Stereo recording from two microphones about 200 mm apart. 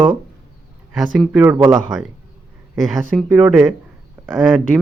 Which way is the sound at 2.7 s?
Centre (ahead or behind).